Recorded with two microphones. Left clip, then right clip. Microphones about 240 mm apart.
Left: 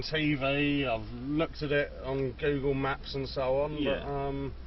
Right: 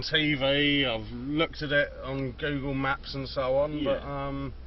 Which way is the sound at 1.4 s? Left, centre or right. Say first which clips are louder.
Right 4 dB; right.